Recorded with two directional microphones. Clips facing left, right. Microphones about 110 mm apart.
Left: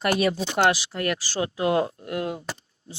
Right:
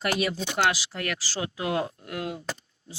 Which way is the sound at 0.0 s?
35° left (ahead or behind).